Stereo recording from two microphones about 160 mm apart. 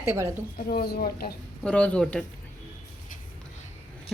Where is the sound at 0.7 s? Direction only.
75° left (ahead or behind).